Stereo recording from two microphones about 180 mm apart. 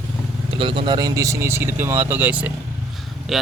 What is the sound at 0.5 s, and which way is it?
Speech, 30° right (ahead or behind).